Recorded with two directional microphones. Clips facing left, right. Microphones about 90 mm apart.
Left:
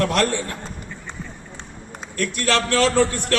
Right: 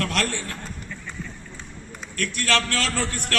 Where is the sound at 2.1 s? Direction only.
20° left (ahead or behind).